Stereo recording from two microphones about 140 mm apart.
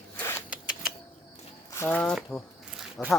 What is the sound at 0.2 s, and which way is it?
Zipper, 20° left (ahead or behind).